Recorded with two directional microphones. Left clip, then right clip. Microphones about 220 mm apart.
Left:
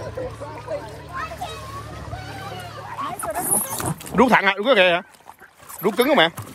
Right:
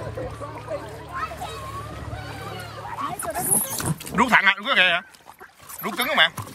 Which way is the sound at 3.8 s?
25° left (ahead or behind).